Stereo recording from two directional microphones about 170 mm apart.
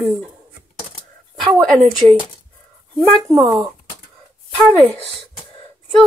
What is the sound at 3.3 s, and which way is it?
Speech, 20° right (ahead or behind).